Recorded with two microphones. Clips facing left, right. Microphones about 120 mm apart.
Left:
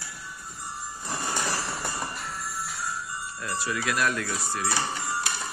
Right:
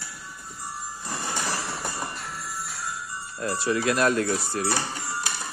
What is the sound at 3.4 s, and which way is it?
Speech, 30° right (ahead or behind).